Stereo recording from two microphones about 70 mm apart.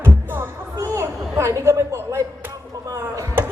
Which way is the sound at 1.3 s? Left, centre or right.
Right.